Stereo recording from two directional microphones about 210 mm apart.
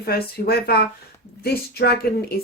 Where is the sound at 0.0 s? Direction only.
45° left (ahead or behind).